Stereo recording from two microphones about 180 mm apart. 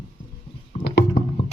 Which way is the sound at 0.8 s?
75° left (ahead or behind).